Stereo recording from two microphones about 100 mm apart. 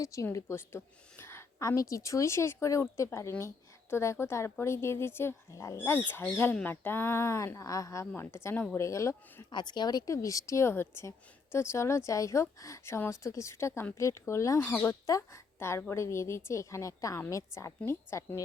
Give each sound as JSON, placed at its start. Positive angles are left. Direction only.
{"t": 0.0, "sound": "a woman's voice", "side_deg": 30}
{"t": 9.5, "sound": "a woman's voice", "side_deg": 50}
{"t": 14.6, "sound": "speech", "side_deg": 20}
{"t": 14.8, "sound": "a woman's voice", "side_deg": 35}